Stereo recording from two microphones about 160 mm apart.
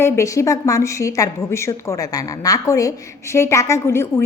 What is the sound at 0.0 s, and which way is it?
A woman's voice, 20° left (ahead or behind).